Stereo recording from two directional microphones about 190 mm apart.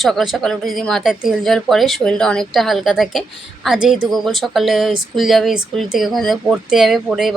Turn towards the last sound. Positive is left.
turn(degrees=0)  # may be behind; listen again after turning